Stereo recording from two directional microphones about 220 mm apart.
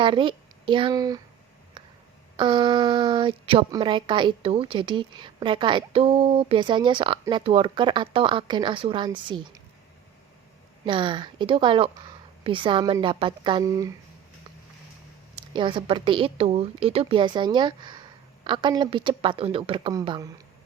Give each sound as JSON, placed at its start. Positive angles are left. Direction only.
{"t": 0.0, "sound": "speech", "side_deg": -20}
{"t": 1.8, "sound": "a sound", "side_deg": -20}
{"t": 2.3, "sound": "speech", "side_deg": -20}
{"t": 10.8, "sound": "speech", "side_deg": -20}
{"t": 15.5, "sound": "speech", "side_deg": -20}